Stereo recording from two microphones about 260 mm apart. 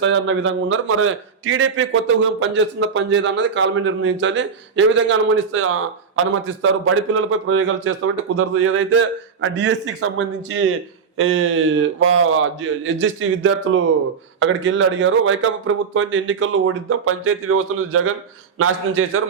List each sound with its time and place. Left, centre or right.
0.0 s a man's voice: right